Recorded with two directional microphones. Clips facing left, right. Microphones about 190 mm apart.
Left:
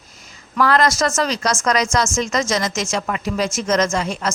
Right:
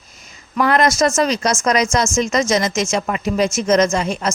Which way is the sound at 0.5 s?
20° right (ahead or behind).